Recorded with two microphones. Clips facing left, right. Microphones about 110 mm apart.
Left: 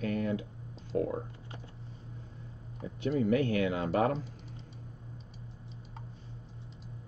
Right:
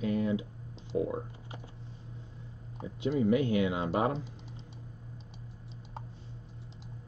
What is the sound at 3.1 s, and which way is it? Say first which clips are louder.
Speech: right 1 dB; 20° right (ahead or behind).